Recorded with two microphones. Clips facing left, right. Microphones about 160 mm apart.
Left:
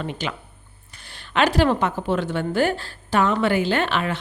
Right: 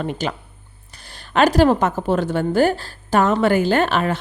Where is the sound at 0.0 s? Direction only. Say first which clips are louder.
Right 4 dB; 45° right (ahead or behind).